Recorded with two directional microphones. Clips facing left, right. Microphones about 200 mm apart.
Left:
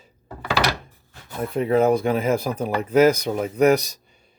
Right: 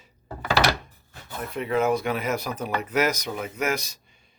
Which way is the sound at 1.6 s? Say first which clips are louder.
Left 5 dB; 35° left (ahead or behind).